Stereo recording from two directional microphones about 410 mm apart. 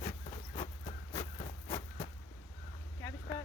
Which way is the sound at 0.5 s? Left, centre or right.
Centre.